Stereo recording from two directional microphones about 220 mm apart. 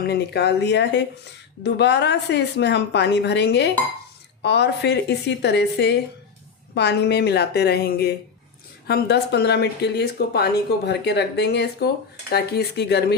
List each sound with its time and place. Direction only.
0.0 s speech: 50° left (ahead or behind)